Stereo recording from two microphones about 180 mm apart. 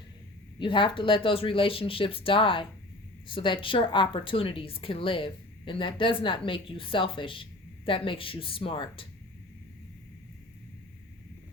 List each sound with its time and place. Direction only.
0.6 s speech: 25° left (ahead or behind)